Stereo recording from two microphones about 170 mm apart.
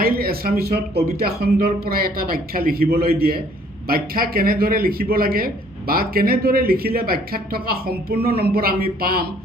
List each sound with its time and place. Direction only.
0.0 s speech: 65° right (ahead or behind)